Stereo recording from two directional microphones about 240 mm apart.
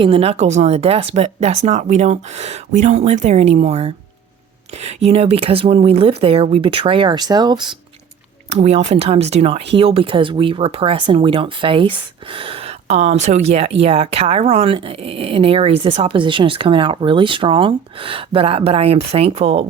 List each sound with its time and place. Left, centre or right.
0.0 s speech: right